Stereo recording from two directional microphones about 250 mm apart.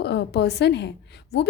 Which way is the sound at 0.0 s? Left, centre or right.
Left.